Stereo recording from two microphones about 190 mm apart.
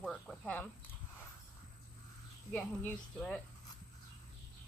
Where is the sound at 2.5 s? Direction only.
5° left (ahead or behind).